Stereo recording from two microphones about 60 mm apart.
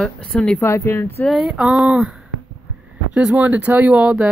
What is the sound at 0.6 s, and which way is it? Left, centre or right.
Speech, left.